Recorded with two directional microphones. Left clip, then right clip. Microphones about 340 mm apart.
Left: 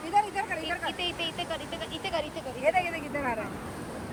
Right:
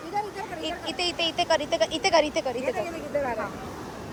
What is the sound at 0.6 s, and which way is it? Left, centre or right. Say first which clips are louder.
Speech: right 2 dB; centre.